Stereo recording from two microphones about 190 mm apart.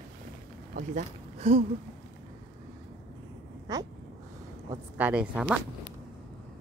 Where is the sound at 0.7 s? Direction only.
45° right (ahead or behind).